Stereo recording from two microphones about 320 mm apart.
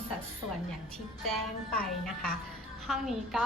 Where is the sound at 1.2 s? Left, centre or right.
Centre.